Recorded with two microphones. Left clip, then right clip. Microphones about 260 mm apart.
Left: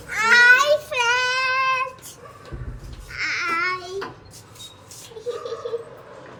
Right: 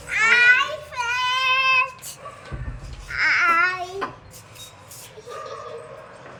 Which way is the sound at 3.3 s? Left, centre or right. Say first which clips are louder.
Right 4 dB; centre.